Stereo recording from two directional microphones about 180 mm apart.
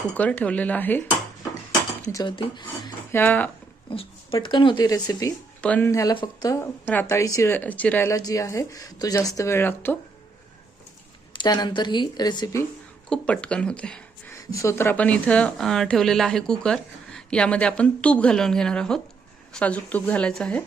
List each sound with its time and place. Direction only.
0.2 s a woman's voice: 10° left (ahead or behind)
2.2 s speech: 25° left (ahead or behind)
3.1 s a woman's voice: 10° left (ahead or behind)
3.8 s speech: 30° left (ahead or behind)
6.8 s a woman's voice: 10° left (ahead or behind)
11.3 s speech: 25° left (ahead or behind)
13.1 s speech: 5° left (ahead or behind)
14.3 s a woman's voice: 15° left (ahead or behind)